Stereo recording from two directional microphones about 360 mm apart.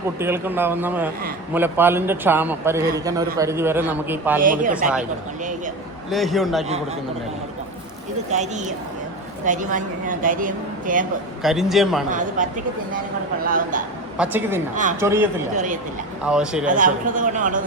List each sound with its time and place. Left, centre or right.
0.2 s a man's voice: centre
4.4 s speech: right
6.1 s a man's voice: centre
8.3 s speech: centre
11.4 s a man's voice: centre
12.1 s speech: right
14.2 s a man's voice: centre
15.5 s speech: right
16.2 s a man's voice: centre
16.6 s speech: right